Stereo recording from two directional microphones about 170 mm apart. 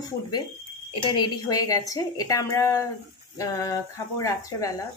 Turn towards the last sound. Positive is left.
turn(degrees=20)  # may be behind; listen again after turning